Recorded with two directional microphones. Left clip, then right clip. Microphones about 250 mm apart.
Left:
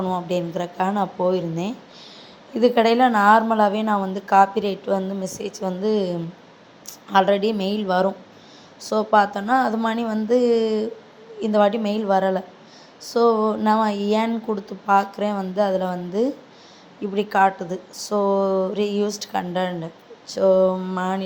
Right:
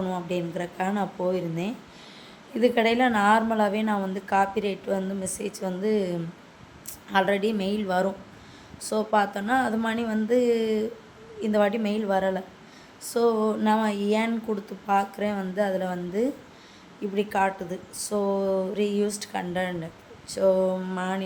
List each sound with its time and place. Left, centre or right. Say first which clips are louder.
0.0 s a woman's voice: left 6 dB; centre